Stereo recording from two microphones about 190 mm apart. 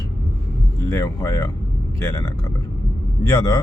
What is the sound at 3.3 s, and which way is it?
Speech, 20° left (ahead or behind).